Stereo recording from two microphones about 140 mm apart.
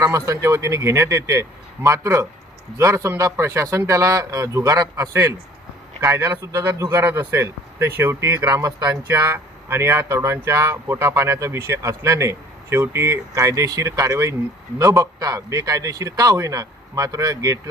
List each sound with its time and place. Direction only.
0.0 s speech: 20° right (ahead or behind)
9.0 s speech: 15° right (ahead or behind)